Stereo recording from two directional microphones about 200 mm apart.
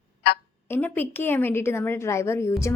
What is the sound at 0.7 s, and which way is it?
A woman's voice, 10° left (ahead or behind).